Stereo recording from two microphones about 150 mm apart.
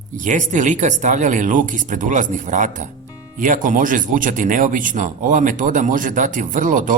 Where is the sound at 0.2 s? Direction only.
55° right (ahead or behind).